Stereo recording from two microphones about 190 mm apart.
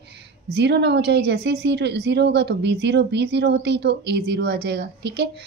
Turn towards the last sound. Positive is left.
turn(degrees=-60)  # may be behind; listen again after turning